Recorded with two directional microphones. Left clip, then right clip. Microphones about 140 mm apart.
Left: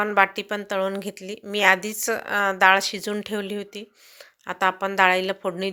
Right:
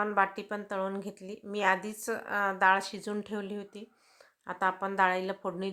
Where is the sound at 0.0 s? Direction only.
25° left (ahead or behind).